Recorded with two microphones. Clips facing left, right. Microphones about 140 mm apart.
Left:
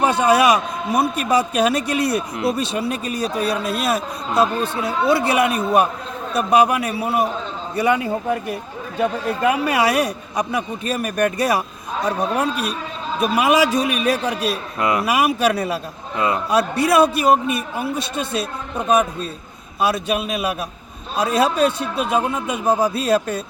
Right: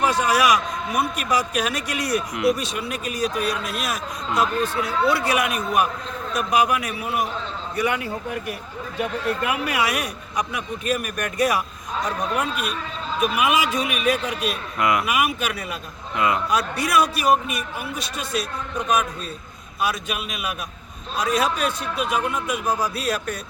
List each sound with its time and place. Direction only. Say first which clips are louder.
0.0 s a man's voice: left 4 dB; 30° left (ahead or behind)